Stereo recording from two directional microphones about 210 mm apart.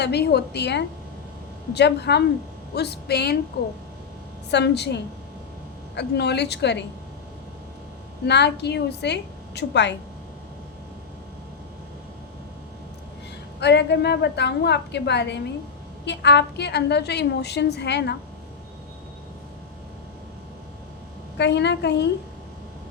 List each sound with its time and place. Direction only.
0.0 s a woman's voice: 50° left (ahead or behind)
4.5 s a woman's voice: 55° left (ahead or behind)
8.3 s a woman's voice: 55° left (ahead or behind)
13.6 s a woman's voice: 55° left (ahead or behind)
21.3 s a woman's voice: 55° left (ahead or behind)